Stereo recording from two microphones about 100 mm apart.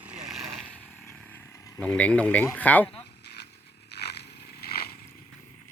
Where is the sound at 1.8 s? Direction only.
10° left (ahead or behind).